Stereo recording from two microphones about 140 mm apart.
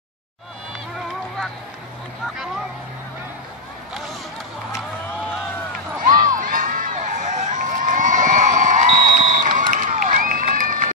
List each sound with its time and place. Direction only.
6.0 s crowd: 75° right (ahead or behind)